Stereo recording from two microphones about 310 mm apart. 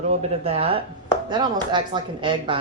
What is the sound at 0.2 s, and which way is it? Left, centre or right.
Speech, centre.